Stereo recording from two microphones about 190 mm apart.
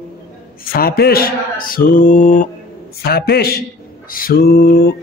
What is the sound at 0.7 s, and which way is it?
Speech, 55° left (ahead or behind).